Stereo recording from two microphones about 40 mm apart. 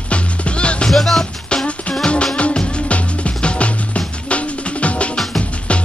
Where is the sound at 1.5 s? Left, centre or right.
Left.